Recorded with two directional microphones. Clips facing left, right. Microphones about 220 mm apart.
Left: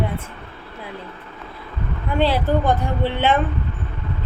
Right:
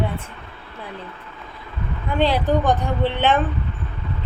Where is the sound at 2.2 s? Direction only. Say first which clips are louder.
Even; 5° left (ahead or behind).